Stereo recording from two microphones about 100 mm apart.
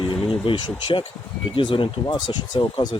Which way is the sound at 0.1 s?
55° left (ahead or behind).